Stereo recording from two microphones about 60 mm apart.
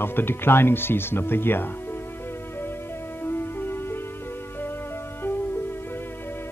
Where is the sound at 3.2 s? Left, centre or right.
Left.